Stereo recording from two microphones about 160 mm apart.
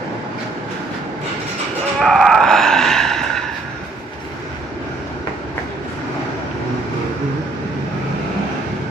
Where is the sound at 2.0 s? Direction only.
Centre (ahead or behind).